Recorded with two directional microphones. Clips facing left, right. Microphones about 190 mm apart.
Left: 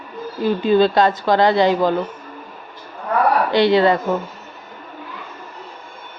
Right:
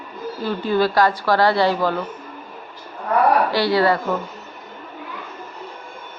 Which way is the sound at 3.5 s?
20° left (ahead or behind).